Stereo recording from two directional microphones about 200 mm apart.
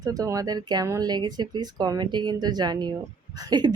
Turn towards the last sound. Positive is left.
turn(degrees=-20)  # may be behind; listen again after turning